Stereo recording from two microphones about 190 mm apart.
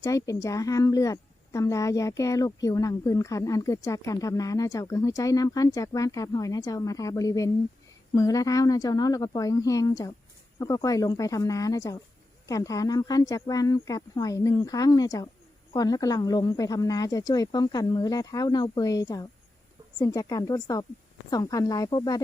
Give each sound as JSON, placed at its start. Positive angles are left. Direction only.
{"t": 0.0, "sound": "a woman's voice", "side_deg": 15}